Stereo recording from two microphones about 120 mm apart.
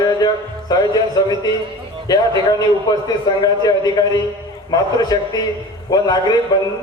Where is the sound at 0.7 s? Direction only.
35° left (ahead or behind).